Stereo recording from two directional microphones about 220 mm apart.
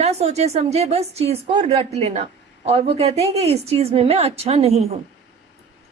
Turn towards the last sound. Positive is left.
turn(degrees=-25)  # may be behind; listen again after turning